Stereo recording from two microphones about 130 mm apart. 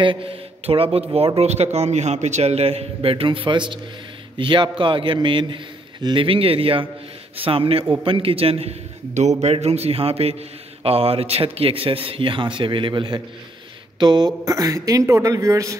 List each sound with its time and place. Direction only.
0.0 s a man's voice: 40° right (ahead or behind); by 15.8 s 25° right (ahead or behind)